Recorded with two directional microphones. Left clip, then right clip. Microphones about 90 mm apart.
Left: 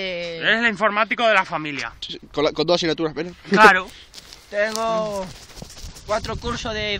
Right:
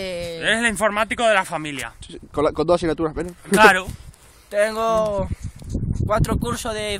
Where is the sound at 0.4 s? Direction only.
60° right (ahead or behind).